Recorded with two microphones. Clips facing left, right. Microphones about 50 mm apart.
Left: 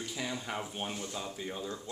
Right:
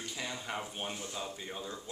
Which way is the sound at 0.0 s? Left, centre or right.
Centre.